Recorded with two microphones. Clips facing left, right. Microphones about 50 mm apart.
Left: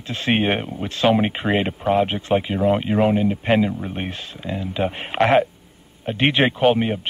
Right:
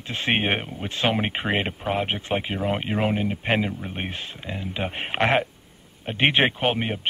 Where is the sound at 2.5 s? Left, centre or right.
Centre.